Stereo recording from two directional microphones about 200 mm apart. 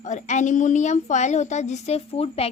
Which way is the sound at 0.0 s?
35° left (ahead or behind).